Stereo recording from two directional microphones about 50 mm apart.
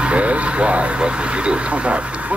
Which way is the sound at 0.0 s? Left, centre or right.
Right.